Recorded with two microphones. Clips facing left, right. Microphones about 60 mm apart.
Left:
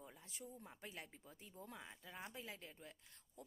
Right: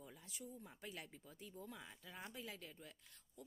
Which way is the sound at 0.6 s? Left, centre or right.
Left.